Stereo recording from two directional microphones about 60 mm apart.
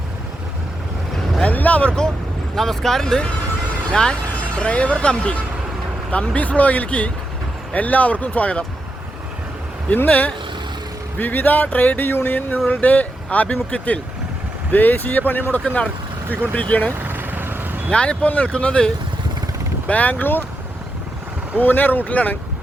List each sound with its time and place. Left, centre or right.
1.5 s speech: left
2.6 s speech: centre; by 8.6 s left
9.9 s speech: left
17.0 s vehicle: right
17.9 s speech: centre
19.9 s speech: left
21.6 s speech: left